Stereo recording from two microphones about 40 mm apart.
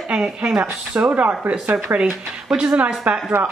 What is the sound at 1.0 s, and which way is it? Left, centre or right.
Speech, right.